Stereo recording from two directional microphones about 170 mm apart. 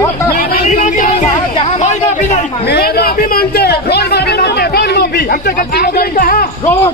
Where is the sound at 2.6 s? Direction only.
70° left (ahead or behind).